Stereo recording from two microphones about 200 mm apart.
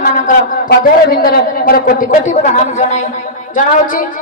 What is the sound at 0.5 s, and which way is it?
A man's voice, 45° left (ahead or behind).